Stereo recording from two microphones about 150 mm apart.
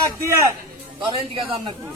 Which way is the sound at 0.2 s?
20° right (ahead or behind).